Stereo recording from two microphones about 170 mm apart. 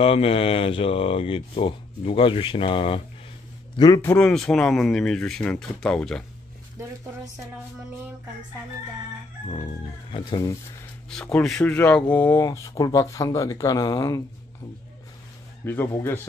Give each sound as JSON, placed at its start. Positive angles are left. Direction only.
{"t": 0.0, "sound": "a man's voice", "side_deg": 35}
{"t": 4.2, "sound": "speech", "side_deg": 5}
{"t": 10.1, "sound": "a man's voice", "side_deg": 25}
{"t": 11.1, "sound": "speech", "side_deg": 5}
{"t": 15.6, "sound": "speech", "side_deg": 15}